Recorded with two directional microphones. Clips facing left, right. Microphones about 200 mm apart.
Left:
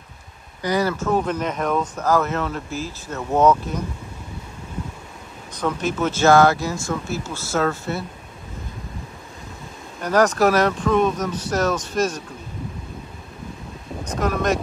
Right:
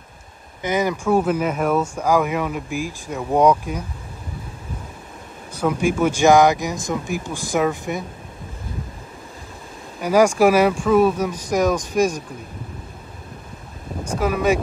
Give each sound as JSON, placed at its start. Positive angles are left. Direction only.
{"t": 0.6, "sound": "speech", "side_deg": -20}
{"t": 5.5, "sound": "speech", "side_deg": -10}
{"t": 9.9, "sound": "speech", "side_deg": -10}
{"t": 14.0, "sound": "speech", "side_deg": -10}